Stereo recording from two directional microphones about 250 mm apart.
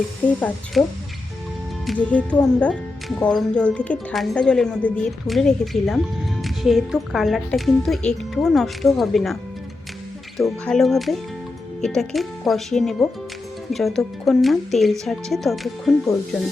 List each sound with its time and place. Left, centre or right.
0.4 s a woman's voice: centre
1.9 s a woman's voice: centre